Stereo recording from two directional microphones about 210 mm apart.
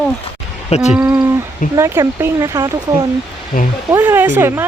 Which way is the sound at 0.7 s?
35° left (ahead or behind).